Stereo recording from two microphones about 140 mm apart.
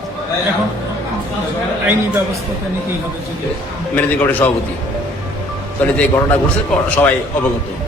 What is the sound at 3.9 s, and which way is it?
Speech, 10° left (ahead or behind).